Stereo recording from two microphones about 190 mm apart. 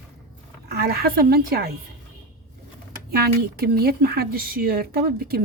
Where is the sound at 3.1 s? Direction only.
55° right (ahead or behind).